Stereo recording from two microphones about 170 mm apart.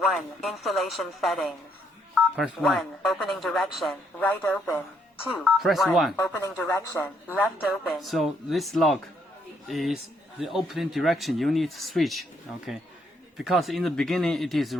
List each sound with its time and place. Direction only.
0.0 s speech: centre (ahead or behind)
6.1 s speech: 10° left (ahead or behind)
7.7 s speech: centre (ahead or behind)
13.3 s speech: centre (ahead or behind)